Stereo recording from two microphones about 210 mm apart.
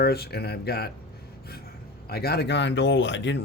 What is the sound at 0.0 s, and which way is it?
Speech, 50° left (ahead or behind).